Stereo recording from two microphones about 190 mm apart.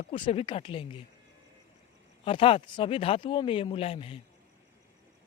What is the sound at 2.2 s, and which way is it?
Speech, 30° left (ahead or behind).